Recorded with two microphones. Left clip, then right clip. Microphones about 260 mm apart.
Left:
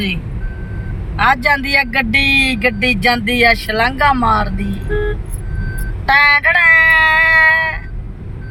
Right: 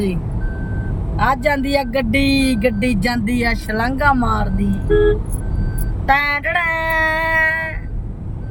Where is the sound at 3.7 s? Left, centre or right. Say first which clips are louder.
Left 3 dB; centre.